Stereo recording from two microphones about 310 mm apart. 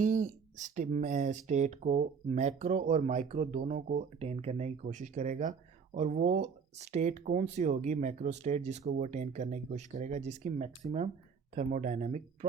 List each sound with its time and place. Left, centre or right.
0.0 s speech: right